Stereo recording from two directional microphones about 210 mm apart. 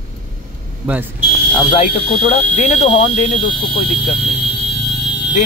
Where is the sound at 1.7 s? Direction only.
30° left (ahead or behind).